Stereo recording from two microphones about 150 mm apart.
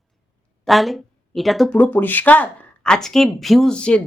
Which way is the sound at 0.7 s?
Centre (ahead or behind).